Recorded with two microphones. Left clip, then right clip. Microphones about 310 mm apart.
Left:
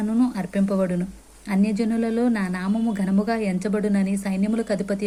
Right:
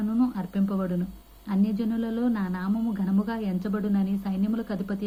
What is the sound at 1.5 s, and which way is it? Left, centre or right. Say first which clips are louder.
Speech: left 5 dB; centre.